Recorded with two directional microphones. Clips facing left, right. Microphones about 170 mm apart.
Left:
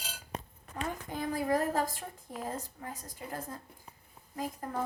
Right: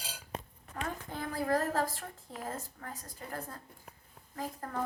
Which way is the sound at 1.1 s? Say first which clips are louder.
Left 1 dB; 15° left (ahead or behind).